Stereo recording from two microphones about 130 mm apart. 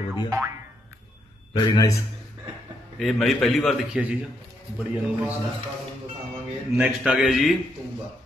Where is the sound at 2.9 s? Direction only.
Centre (ahead or behind).